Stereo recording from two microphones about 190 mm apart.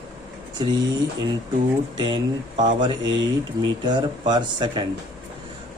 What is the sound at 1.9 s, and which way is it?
Speech, 25° right (ahead or behind).